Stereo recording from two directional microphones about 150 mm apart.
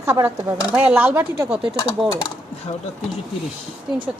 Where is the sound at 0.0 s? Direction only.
20° right (ahead or behind).